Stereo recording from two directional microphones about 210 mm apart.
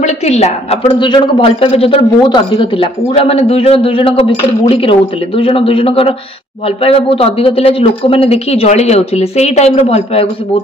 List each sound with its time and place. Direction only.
0.0 s a woman's voice: 30° left (ahead or behind)